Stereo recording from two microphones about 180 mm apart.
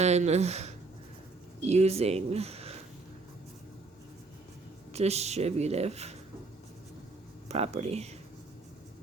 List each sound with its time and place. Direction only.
0.0 s speech: 40° right (ahead or behind)
4.9 s speech: 35° right (ahead or behind)
7.4 s speech: 35° right (ahead or behind)